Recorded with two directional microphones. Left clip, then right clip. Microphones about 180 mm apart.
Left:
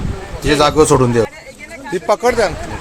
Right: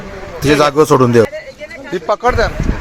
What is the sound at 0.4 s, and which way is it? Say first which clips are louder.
Speech: right 1 dB; 25° right (ahead or behind).